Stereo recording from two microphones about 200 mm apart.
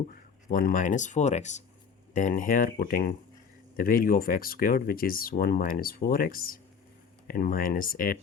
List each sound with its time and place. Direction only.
0.4 s speech: 45° left (ahead or behind)